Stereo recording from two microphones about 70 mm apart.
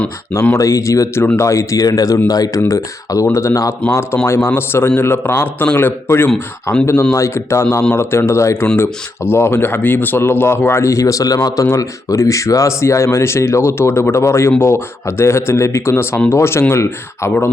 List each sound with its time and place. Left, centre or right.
0.5 s speech: left
7.1 s speech: left